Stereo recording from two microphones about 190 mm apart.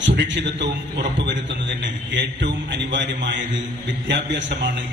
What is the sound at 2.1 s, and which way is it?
A man's voice, 70° right (ahead or behind).